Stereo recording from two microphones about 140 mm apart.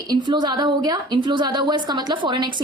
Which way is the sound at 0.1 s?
30° right (ahead or behind).